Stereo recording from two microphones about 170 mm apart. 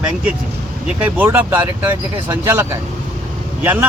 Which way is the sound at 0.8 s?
10° right (ahead or behind).